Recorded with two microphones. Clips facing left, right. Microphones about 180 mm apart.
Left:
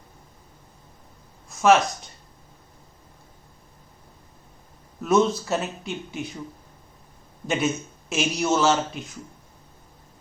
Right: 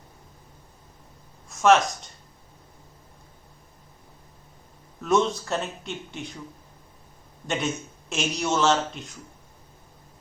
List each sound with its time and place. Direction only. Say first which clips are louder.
1.5 s speech: left 1 dB; centre (ahead or behind)
5.0 s speech: left 3 dB; centre (ahead or behind)
7.4 s speech: left 3 dB; centre (ahead or behind)